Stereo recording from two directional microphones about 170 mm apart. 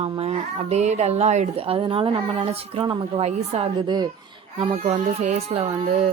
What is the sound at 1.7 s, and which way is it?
Speech, 30° right (ahead or behind).